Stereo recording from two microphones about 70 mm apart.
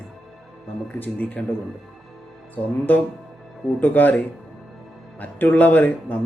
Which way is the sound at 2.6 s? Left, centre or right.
Left.